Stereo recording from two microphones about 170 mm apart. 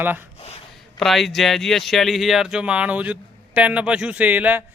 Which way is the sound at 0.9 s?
Centre (ahead or behind).